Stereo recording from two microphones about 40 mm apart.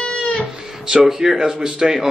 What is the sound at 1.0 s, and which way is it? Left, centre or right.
Speech, centre.